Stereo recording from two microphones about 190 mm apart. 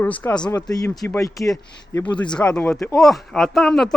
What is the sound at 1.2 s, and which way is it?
Speech, 15° left (ahead or behind).